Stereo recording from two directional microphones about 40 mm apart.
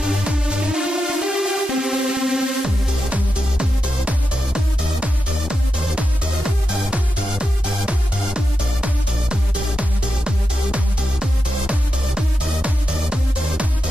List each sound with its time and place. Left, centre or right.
0.0 s music: right
3.1 s music: right
7.2 s music: right